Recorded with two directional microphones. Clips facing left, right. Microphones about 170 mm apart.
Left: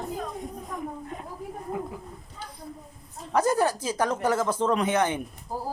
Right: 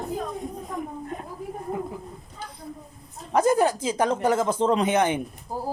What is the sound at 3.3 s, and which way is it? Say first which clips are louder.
Speech: right 3 dB; 20° right (ahead or behind).